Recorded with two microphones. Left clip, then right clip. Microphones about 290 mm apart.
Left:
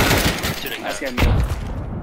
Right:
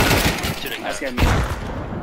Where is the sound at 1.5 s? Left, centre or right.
Right.